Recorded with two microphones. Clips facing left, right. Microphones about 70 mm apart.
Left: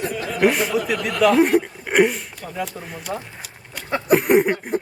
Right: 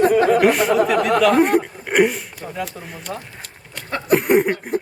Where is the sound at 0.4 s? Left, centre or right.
Centre.